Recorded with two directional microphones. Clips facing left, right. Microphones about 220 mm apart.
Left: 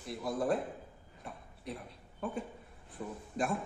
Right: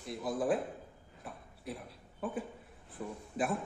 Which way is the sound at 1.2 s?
5° right (ahead or behind).